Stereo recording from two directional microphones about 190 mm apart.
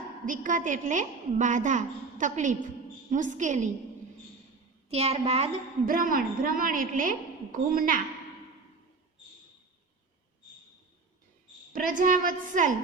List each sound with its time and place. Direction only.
0.3 s a woman's voice: 45° right (ahead or behind)
4.9 s a woman's voice: 35° right (ahead or behind)
5.8 s a woman's voice: 45° right (ahead or behind)
11.7 s a woman's voice: 45° right (ahead or behind)